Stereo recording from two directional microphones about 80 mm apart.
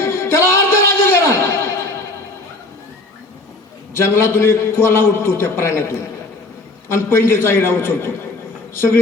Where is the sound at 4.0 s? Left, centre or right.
Left.